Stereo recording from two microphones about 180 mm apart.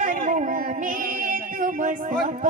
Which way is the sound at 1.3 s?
45° right (ahead or behind).